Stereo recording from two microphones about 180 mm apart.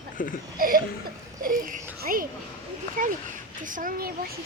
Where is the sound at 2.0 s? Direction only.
50° right (ahead or behind).